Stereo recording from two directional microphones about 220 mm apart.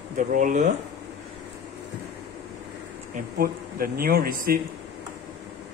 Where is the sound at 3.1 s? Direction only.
40° right (ahead or behind).